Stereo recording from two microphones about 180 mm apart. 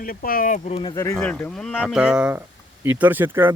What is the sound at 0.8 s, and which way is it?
Speech, 20° left (ahead or behind).